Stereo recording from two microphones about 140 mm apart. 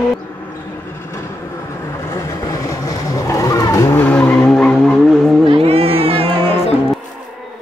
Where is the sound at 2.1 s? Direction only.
25° left (ahead or behind).